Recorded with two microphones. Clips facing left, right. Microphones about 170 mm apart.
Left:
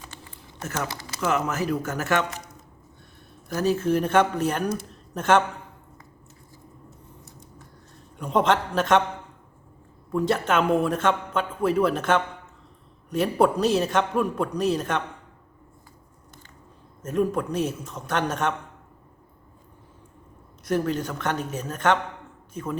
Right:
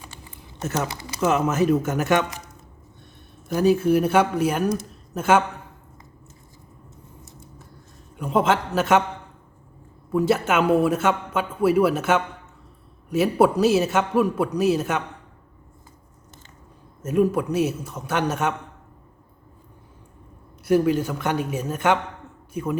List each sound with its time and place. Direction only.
0.0 s typing: 10° right (ahead or behind)
0.8 s speech: 20° right (ahead or behind)
3.5 s a man's voice: 15° right (ahead or behind)
8.1 s a man's voice: 5° right (ahead or behind)
10.1 s a man's voice: 5° right (ahead or behind)
17.0 s a man's voice: 5° right (ahead or behind)
20.7 s a man's voice: 10° right (ahead or behind)